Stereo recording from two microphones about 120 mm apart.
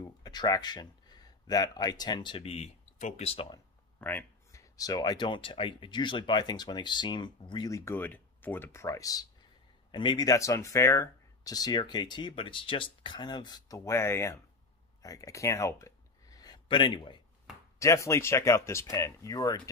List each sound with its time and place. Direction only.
0.0 s speech: 35° left (ahead or behind); by 3.3 s 75° left (ahead or behind)
3.3 s speech: 50° left (ahead or behind)
4.0 s speech: 15° left (ahead or behind)
9.8 s speech: 40° left (ahead or behind); by 14.4 s 20° left (ahead or behind)
15.0 s a sound: 30° left (ahead or behind)
17.7 s speech: 25° left (ahead or behind)